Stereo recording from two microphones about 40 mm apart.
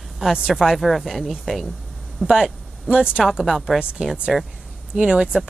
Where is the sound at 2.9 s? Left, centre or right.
Right.